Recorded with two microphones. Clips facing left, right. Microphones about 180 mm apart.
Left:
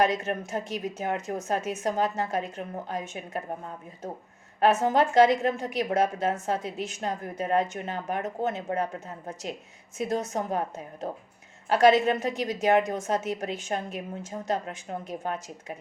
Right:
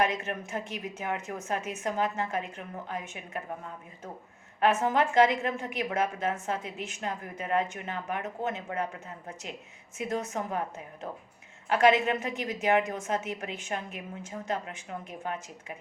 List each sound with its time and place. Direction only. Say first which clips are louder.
0.3 s speech: left 4 dB; 40° left (ahead or behind)
4.9 s speech: left 4 dB; 35° left (ahead or behind)